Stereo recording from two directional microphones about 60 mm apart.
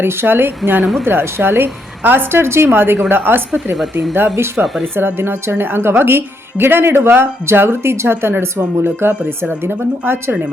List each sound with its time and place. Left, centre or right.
0.0 s a woman's voice: right